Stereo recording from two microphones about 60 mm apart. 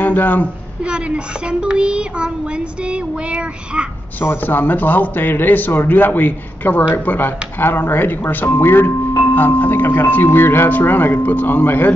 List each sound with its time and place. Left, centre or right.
0.0 s a woman's voice: left
0.8 s child singing: centre
4.4 s speech: left